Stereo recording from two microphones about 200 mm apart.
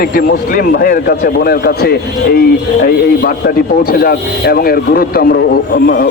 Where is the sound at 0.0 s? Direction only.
50° left (ahead or behind).